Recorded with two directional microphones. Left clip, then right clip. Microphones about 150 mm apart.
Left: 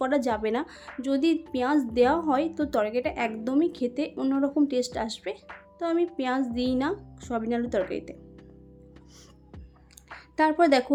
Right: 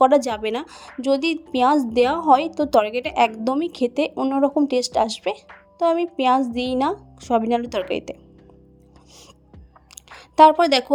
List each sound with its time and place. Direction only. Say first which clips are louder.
0.0 s a woman's voice: right 9 dB; 45° right (ahead or behind)
4.1 s a woman's voice: right 7 dB; 30° right (ahead or behind)
10.2 s a woman's voice: right 10 dB; 50° right (ahead or behind)